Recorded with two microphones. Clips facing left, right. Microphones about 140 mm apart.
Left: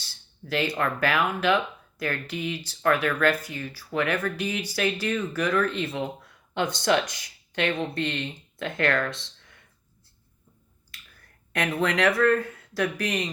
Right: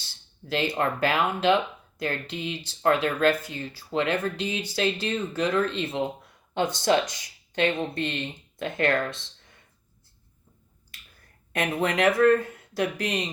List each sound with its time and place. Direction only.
0.0 s a sound: 20° right (ahead or behind)
0.8 s speech: 25° right (ahead or behind)
11.5 s speech: 20° right (ahead or behind)